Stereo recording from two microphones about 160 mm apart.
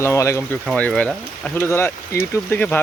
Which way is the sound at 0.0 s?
15° left (ahead or behind).